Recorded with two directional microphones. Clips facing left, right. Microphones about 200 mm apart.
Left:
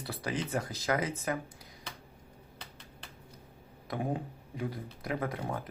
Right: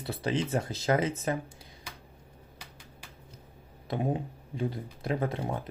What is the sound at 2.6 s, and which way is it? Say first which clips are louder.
Finger snapping: left 1 dB; 10° right (ahead or behind).